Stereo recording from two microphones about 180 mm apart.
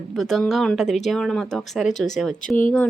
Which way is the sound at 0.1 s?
Centre (ahead or behind).